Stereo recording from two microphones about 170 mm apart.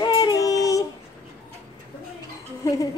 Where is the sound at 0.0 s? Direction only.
25° left (ahead or behind).